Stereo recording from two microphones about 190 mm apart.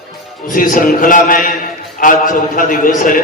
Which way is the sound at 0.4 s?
45° left (ahead or behind).